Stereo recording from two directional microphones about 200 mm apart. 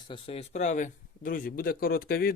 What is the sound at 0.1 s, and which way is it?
A man's voice, 30° left (ahead or behind).